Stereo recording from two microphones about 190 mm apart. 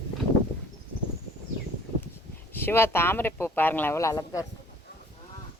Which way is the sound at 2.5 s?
10° left (ahead or behind).